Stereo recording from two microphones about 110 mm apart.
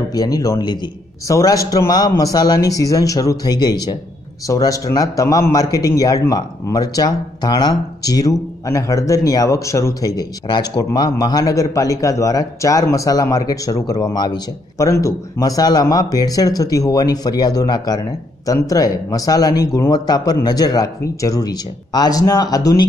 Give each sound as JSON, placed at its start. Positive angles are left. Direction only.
{"t": 0.1, "sound": "a man's voice", "side_deg": 35}